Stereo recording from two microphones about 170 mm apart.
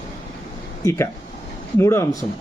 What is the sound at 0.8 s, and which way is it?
A man's voice, 20° left (ahead or behind).